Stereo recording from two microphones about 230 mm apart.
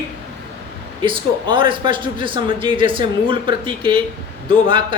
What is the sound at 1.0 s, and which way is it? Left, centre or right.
A man's voice, right.